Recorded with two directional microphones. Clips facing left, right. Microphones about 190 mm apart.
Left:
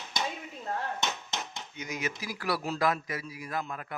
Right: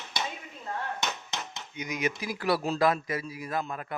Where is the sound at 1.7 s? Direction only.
15° right (ahead or behind).